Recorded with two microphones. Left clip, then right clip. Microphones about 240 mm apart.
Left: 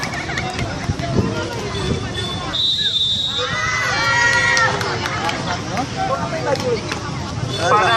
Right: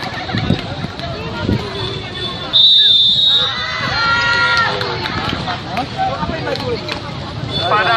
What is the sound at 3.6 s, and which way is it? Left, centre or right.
Crowd, left.